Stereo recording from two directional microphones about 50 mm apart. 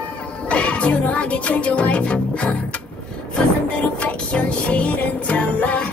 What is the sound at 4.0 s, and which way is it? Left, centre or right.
Music, left.